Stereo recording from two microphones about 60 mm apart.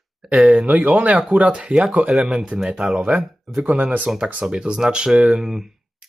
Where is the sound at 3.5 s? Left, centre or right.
Right; by 5.7 s centre.